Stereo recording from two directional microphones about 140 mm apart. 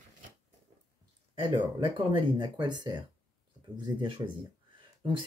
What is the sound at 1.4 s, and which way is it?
Speech, 35° right (ahead or behind).